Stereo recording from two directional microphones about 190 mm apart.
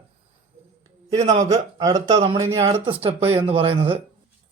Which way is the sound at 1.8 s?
20° right (ahead or behind).